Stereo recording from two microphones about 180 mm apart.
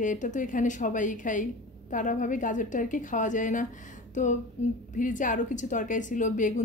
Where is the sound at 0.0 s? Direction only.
45° left (ahead or behind).